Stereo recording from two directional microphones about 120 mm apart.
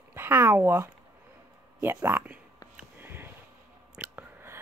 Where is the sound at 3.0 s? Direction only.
20° right (ahead or behind).